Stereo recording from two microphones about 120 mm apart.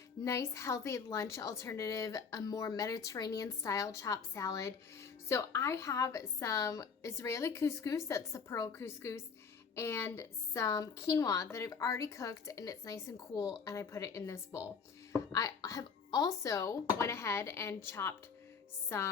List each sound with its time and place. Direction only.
0.3 s a woman's voice: 25° left (ahead or behind)